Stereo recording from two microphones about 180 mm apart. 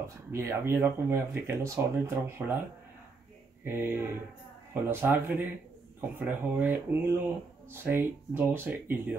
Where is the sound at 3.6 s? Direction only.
15° right (ahead or behind).